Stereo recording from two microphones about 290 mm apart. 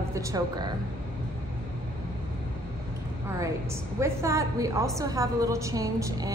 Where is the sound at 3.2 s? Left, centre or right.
Centre.